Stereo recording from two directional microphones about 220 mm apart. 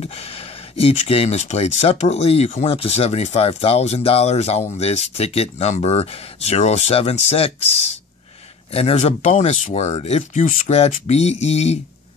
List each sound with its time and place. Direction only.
0.0 s speech: 25° left (ahead or behind)
8.7 s speech: 30° left (ahead or behind)